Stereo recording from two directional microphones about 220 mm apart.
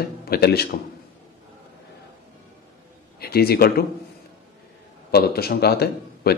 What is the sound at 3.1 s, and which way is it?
Speech, 45° left (ahead or behind).